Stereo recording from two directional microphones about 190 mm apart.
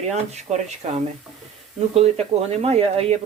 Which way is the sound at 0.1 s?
35° right (ahead or behind).